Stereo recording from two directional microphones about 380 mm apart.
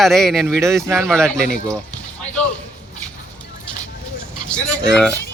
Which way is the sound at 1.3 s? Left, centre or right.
Right.